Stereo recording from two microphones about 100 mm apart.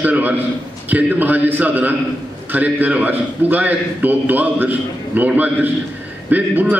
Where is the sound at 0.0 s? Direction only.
15° right (ahead or behind).